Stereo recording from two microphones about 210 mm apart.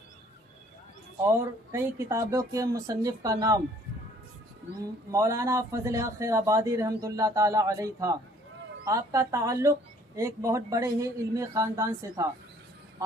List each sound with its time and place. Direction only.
1.3 s speech: 15° right (ahead or behind)
5.1 s speech: 15° right (ahead or behind)